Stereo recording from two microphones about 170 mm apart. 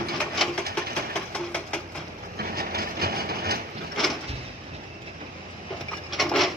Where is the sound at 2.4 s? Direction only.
60° right (ahead or behind).